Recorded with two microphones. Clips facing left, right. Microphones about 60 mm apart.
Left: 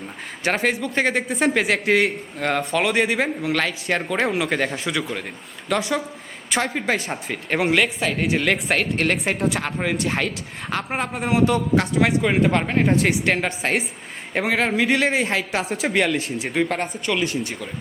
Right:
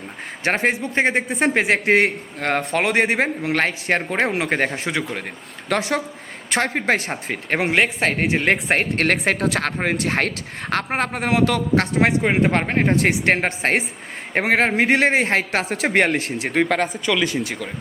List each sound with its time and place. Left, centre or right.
0.4 s a man's voice: right
5.6 s a man's voice: right
7.7 s a man's voice: right
9.2 s speech: right
9.8 s a man's voice: right
11.9 s a man's voice: right
16.6 s speech: right